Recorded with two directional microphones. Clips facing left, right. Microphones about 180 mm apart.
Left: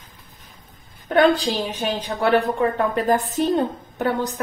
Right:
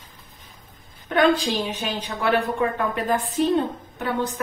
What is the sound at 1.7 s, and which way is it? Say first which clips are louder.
A woman's voice: left 4 dB; 35° left (ahead or behind).